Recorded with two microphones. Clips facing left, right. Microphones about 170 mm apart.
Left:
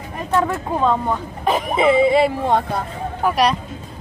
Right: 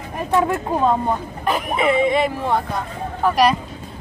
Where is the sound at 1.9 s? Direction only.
30° left (ahead or behind).